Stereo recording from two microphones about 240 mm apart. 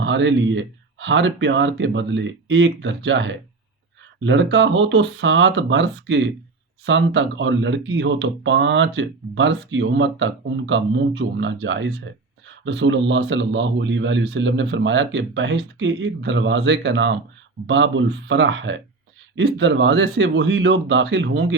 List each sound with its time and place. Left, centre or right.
0.0 s speech: right